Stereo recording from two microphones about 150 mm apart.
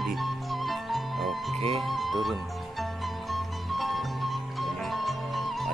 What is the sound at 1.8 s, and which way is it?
Speech, centre (ahead or behind).